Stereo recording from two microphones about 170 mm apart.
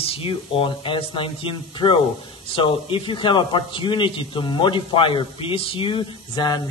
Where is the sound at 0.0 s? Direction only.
35° left (ahead or behind).